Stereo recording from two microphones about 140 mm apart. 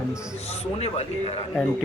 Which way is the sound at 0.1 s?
5° right (ahead or behind).